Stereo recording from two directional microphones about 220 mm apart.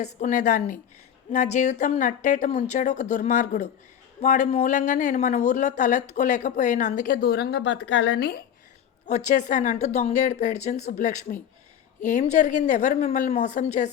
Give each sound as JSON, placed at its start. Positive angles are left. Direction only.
{"t": 0.0, "sound": "speech", "side_deg": 35}
{"t": 9.0, "sound": "speech", "side_deg": 30}